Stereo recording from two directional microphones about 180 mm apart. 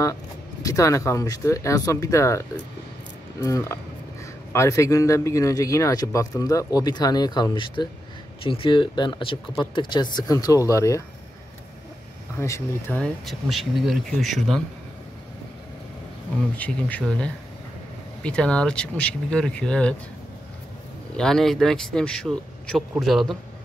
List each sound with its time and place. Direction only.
0.6 s a man's voice: 20° left (ahead or behind)
12.4 s speech: 15° left (ahead or behind)
16.5 s speech: 10° left (ahead or behind)
21.2 s speech: centre (ahead or behind)